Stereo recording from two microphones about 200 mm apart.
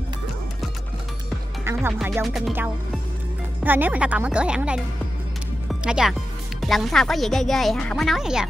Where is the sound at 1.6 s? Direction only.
10° right (ahead or behind).